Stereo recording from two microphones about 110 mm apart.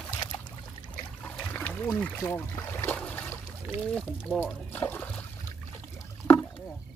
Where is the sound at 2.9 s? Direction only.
15° left (ahead or behind).